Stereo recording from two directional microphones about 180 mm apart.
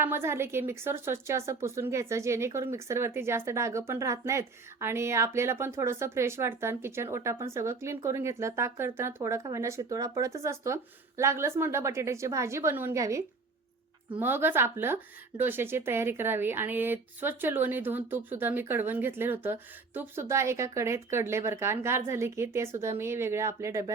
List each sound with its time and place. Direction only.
0.0 s speech: 15° right (ahead or behind)